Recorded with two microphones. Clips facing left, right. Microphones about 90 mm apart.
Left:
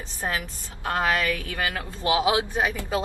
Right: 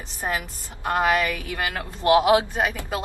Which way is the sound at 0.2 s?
15° right (ahead or behind).